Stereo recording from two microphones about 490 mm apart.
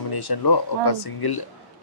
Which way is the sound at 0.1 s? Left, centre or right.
Left.